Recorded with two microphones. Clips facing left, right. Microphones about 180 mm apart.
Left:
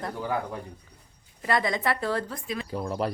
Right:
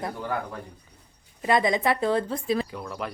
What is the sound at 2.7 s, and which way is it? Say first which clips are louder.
Speech: left 5 dB; 30° left (ahead or behind).